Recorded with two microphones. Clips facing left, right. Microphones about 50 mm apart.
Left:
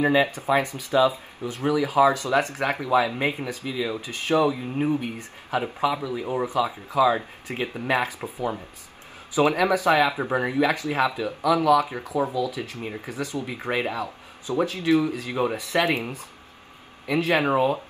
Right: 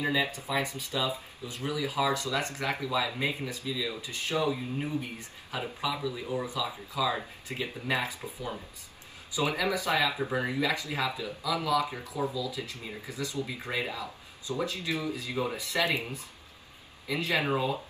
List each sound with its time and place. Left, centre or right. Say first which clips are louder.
0.0 s speech: left 9 dB; left